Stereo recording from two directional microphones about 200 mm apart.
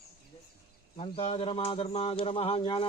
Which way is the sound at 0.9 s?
30° left (ahead or behind).